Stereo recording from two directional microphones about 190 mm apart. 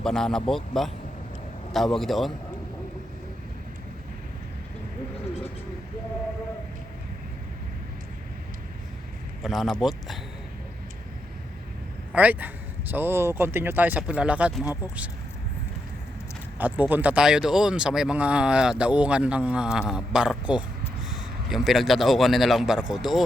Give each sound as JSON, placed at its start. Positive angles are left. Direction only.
{"t": 0.0, "sound": "speech", "side_deg": 5}
{"t": 9.4, "sound": "speech", "side_deg": 0}
{"t": 12.1, "sound": "a man's voice", "side_deg": -10}
{"t": 16.6, "sound": "speech", "side_deg": -10}